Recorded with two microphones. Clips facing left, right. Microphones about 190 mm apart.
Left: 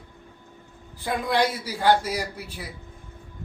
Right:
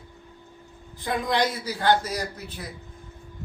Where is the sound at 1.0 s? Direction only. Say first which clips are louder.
Left 1 dB; 10° left (ahead or behind).